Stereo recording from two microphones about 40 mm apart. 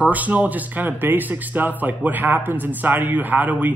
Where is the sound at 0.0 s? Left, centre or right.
Right.